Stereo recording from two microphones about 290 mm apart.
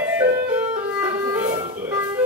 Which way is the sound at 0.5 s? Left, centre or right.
Centre.